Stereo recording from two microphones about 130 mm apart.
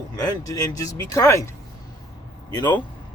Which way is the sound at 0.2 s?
25° left (ahead or behind).